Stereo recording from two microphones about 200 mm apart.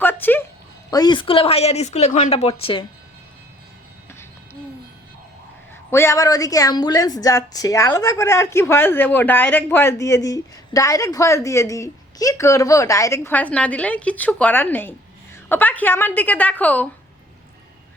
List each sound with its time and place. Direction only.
0.0 s music: 10° left (ahead or behind)
0.9 s speech: 20° left (ahead or behind)
5.9 s a woman's voice: 15° left (ahead or behind)